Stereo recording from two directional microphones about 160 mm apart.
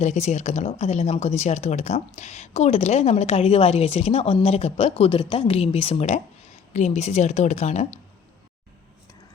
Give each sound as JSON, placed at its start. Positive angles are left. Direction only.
{"t": 0.0, "sound": "a woman's voice", "side_deg": 45}